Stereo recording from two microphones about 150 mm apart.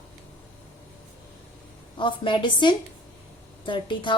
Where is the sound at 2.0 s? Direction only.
30° left (ahead or behind).